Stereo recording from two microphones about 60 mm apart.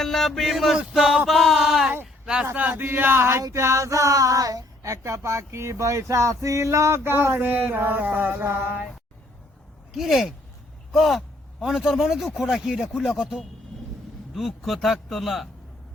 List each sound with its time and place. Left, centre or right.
0.0 s speech: centre
2.2 s speech: centre
2.6 s speech: right
7.0 s speech: right
9.9 s speech: centre